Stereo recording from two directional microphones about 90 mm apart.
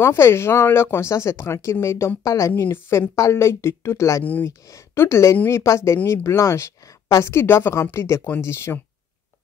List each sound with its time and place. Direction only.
0.0 s speech: 30° left (ahead or behind)
4.2 s speech: 20° left (ahead or behind)
4.5 s speech: 35° left (ahead or behind)